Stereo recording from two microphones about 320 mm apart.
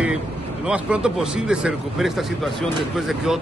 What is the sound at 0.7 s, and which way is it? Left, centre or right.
Speech, centre.